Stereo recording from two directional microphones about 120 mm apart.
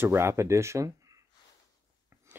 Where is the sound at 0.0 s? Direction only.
20° right (ahead or behind).